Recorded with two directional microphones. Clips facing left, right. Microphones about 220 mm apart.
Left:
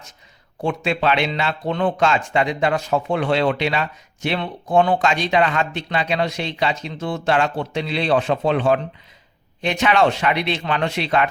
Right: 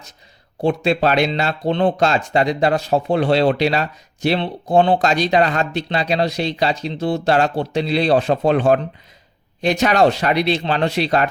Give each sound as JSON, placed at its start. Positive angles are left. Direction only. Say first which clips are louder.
{"t": 0.6, "sound": "speech", "louder": "right 4 dB", "side_deg": -35}